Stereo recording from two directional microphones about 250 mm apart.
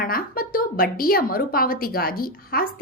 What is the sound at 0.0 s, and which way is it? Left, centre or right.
A woman's voice, left.